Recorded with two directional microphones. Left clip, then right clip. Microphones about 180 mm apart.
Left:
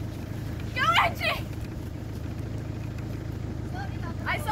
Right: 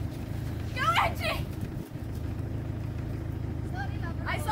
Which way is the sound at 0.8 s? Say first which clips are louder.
Left 3 dB; 70° right (ahead or behind).